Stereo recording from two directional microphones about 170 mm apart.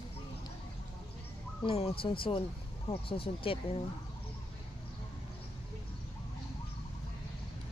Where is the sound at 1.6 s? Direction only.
35° left (ahead or behind).